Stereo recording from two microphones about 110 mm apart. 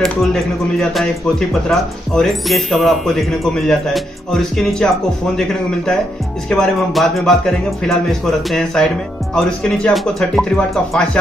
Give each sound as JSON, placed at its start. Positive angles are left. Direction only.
{"t": 0.0, "sound": "speech", "side_deg": 5}
{"t": 6.5, "sound": "speech", "side_deg": 0}